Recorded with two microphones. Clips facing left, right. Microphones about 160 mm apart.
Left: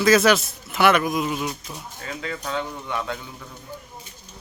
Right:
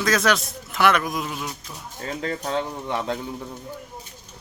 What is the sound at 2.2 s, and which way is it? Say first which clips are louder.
Speech: right 2 dB; 35° right (ahead or behind).